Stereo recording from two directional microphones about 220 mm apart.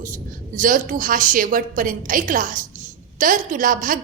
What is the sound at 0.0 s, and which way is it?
A woman's voice, 35° right (ahead or behind).